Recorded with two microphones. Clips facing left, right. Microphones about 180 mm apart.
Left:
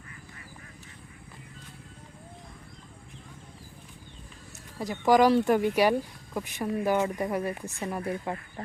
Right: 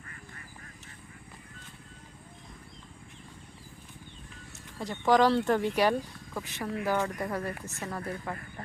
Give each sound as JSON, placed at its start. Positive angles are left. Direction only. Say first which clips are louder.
{"t": 4.8, "sound": "speech", "louder": "left 2 dB", "side_deg": 10}